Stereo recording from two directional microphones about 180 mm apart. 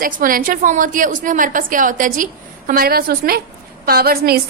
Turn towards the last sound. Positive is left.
turn(degrees=-60)  # may be behind; listen again after turning